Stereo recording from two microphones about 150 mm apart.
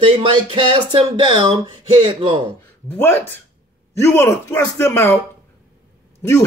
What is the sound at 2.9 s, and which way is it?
A man's voice, 15° left (ahead or behind).